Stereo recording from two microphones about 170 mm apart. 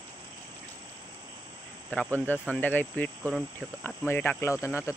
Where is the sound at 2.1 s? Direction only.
10° left (ahead or behind).